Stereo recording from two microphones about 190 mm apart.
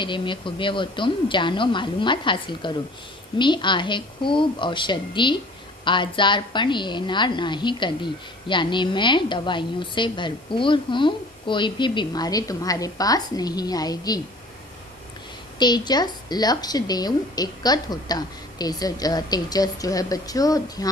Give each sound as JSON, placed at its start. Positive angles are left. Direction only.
{"t": 0.0, "sound": "a woman's voice", "side_deg": 25}
{"t": 15.5, "sound": "a woman's voice", "side_deg": 20}